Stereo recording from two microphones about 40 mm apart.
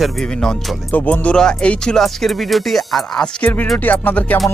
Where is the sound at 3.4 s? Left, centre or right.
Left.